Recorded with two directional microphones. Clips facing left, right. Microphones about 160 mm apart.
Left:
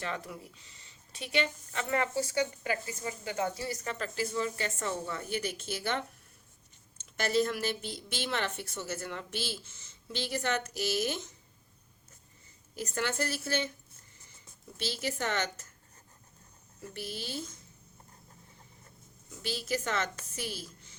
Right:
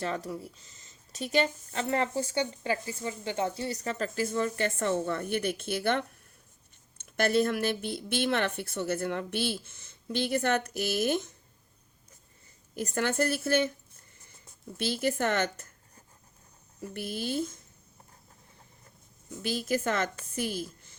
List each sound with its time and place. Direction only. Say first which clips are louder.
0.0 s speech: right 5 dB; 40° right (ahead or behind); by 6.0 s 55° right (ahead or behind)
7.0 s a woman's voice: right 3 dB; 55° right (ahead or behind)
12.7 s a woman's voice: right 5 dB; 50° right (ahead or behind)
14.8 s a woman's voice: right 6 dB; 55° right (ahead or behind)
16.9 s a woman's voice: right 7 dB; 50° right (ahead or behind)
19.4 s a woman's voice: right 5 dB; 50° right (ahead or behind)